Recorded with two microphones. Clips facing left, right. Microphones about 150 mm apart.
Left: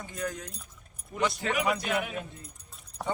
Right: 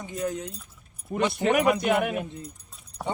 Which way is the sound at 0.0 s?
20° right (ahead or behind).